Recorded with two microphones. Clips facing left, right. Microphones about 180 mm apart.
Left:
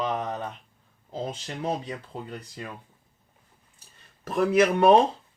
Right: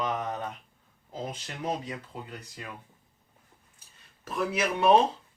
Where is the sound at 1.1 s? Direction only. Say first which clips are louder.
Left 4 dB; 30° left (ahead or behind).